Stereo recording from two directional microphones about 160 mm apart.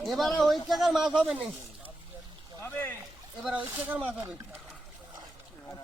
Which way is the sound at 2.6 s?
15° left (ahead or behind).